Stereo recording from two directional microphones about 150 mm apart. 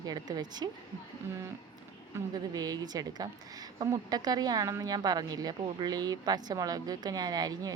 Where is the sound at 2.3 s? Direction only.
25° right (ahead or behind).